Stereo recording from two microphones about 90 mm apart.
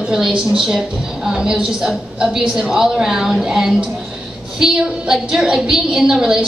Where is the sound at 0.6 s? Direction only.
5° right (ahead or behind).